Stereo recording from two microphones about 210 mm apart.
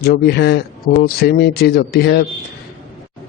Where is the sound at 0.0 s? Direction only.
50° left (ahead or behind).